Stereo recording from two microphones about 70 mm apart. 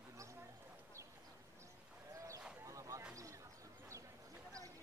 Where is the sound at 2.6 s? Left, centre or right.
Right.